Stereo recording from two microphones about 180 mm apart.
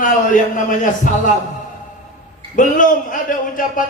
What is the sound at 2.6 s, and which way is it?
A man's voice, 45° left (ahead or behind).